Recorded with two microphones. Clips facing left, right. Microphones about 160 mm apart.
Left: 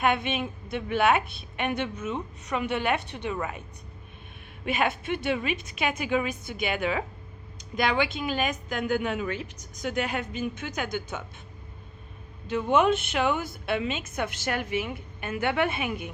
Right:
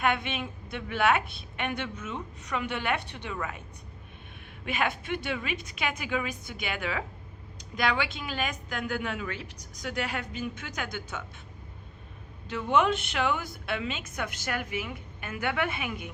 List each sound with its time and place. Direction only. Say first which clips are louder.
0.0 s a woman's voice: left 3 dB; 20° left (ahead or behind)
1.2 s a woman's voice: even; 20° right (ahead or behind)
1.5 s a woman's voice: left 4 dB; 20° left (ahead or behind)
4.6 s a woman's voice: left 3 dB; 20° left (ahead or behind)
12.5 s a woman's voice: left 3 dB; 20° left (ahead or behind)